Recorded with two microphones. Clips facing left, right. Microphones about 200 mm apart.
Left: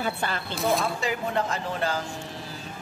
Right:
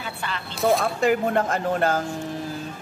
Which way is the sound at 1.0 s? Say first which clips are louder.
Right 7 dB; 50° right (ahead or behind).